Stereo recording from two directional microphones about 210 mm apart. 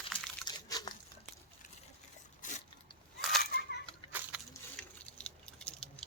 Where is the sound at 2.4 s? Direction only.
35° left (ahead or behind).